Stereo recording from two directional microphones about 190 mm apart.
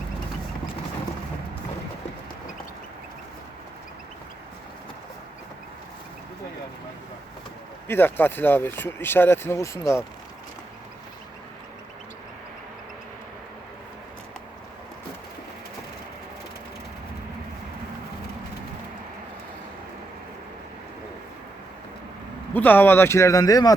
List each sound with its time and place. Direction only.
7.9 s speech: 10° left (ahead or behind)
22.5 s speech: 10° left (ahead or behind)